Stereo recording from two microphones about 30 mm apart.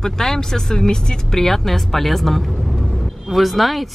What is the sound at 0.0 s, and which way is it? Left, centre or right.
Speech, centre.